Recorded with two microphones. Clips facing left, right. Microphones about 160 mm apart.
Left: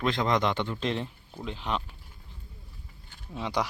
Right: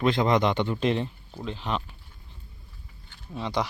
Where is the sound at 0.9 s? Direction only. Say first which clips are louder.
Right 4 dB; centre (ahead or behind).